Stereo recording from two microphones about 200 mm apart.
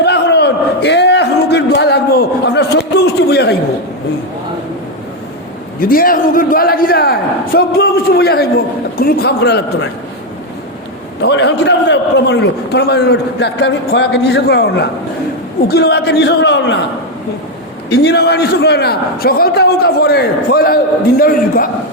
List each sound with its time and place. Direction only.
0.0 s a sound: 55° left (ahead or behind)
5.9 s a man's voice: 45° left (ahead or behind)
11.2 s a man's voice: 60° left (ahead or behind)
17.8 s a man's voice: 55° left (ahead or behind)